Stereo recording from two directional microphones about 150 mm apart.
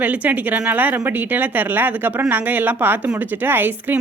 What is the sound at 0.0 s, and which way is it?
A woman's voice, 10° right (ahead or behind).